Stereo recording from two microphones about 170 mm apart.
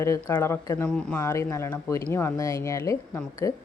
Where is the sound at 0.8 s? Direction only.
5° left (ahead or behind).